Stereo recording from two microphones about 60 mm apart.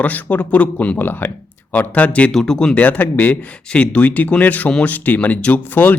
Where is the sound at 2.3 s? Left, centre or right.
Centre.